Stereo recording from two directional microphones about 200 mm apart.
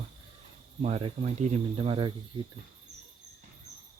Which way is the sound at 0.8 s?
35° right (ahead or behind).